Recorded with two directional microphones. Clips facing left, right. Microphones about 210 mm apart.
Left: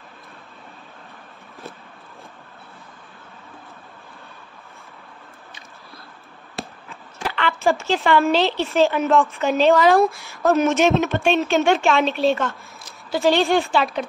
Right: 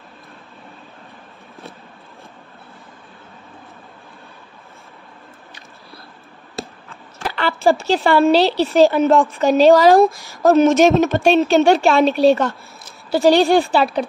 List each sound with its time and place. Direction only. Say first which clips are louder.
7.2 s a woman's voice: right 4 dB; 35° right (ahead or behind)